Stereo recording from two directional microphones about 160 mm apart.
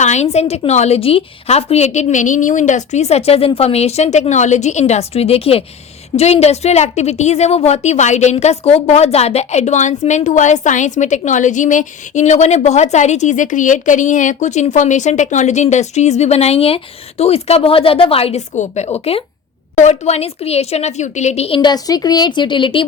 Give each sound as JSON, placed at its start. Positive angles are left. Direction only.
{"t": 0.0, "sound": "a woman's voice", "side_deg": 45}